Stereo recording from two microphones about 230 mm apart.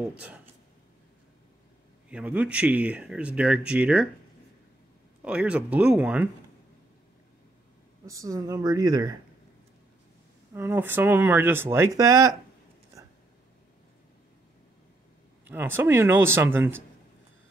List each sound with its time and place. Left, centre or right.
2.0 s speech: centre
5.2 s speech: centre
8.1 s speech: centre
10.5 s speech: centre
15.4 s speech: centre